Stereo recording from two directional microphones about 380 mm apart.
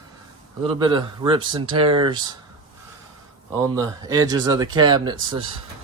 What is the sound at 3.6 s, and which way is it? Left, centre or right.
Speech, centre.